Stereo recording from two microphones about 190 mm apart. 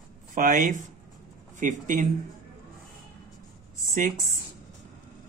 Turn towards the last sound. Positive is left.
turn(degrees=-45)  # may be behind; listen again after turning